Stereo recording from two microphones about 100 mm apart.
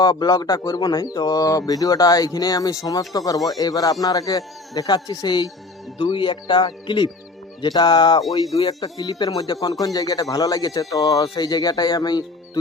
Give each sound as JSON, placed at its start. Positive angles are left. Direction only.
{"t": 0.0, "sound": "speech", "side_deg": 40}